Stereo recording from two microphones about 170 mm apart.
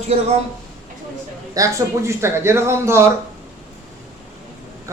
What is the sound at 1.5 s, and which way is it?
Speech, 15° right (ahead or behind).